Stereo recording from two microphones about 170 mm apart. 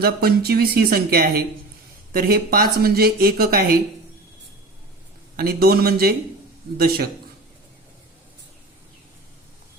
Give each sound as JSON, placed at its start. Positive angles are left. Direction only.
{"t": 0.0, "sound": "speech", "side_deg": -65}
{"t": 5.4, "sound": "speech", "side_deg": -65}